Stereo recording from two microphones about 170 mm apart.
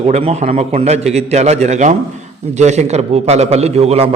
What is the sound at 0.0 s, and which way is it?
A man's voice, 35° right (ahead or behind).